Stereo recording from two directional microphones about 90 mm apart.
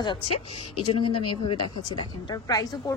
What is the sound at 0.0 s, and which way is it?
A woman's voice, 65° left (ahead or behind).